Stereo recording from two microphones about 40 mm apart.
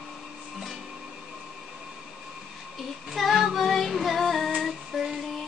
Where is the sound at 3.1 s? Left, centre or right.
Centre.